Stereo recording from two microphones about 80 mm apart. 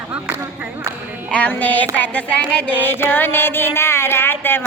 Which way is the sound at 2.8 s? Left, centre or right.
Left.